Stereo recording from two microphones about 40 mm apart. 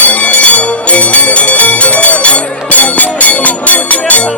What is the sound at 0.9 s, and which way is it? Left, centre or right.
Music, left.